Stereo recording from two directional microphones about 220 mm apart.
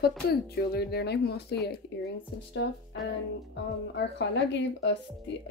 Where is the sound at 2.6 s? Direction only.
55° left (ahead or behind).